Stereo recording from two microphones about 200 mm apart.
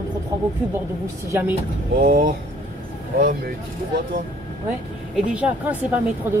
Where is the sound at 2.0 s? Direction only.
50° right (ahead or behind).